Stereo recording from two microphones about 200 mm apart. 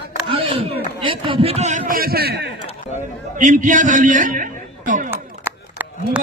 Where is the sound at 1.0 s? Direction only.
25° right (ahead or behind); by 2.5 s 55° right (ahead or behind).